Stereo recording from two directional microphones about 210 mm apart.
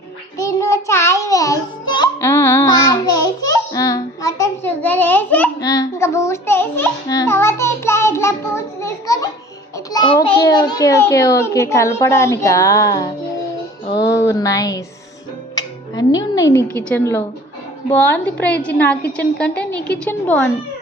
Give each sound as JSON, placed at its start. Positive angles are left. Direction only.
{"t": 0.3, "sound": "child singing", "side_deg": 15}
{"t": 0.9, "sound": "music", "side_deg": 15}
{"t": 9.7, "sound": "a sound", "side_deg": 20}
{"t": 15.5, "sound": "music", "side_deg": 20}
{"t": 16.6, "sound": "a woman's voice", "side_deg": -15}
{"t": 16.9, "sound": "a woman's voice", "side_deg": 10}